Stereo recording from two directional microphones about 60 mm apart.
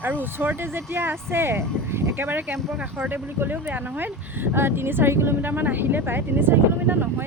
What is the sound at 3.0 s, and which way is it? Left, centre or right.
Speech, right.